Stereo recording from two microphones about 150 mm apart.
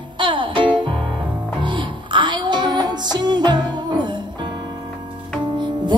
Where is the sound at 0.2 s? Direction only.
35° right (ahead or behind).